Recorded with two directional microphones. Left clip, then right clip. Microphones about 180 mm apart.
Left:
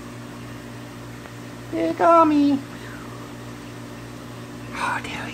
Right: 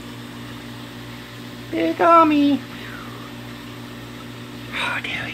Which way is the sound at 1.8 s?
20° right (ahead or behind).